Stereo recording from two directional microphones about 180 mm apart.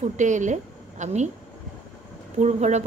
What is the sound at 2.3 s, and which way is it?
Speech, 40° right (ahead or behind).